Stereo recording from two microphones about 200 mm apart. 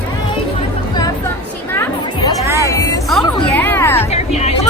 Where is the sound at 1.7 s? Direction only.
10° left (ahead or behind).